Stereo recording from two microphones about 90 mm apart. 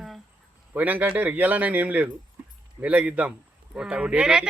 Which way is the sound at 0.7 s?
15° right (ahead or behind).